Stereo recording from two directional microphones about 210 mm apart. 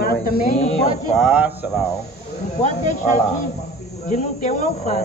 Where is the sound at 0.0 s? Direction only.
45° left (ahead or behind).